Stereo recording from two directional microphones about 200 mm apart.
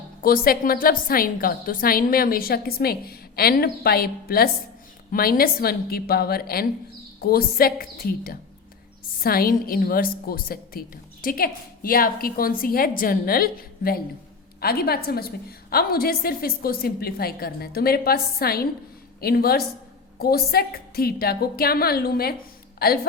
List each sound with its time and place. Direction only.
0.2 s a woman's voice: 45° left (ahead or behind)